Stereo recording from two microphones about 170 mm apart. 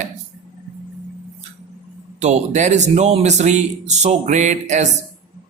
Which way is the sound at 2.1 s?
40° right (ahead or behind).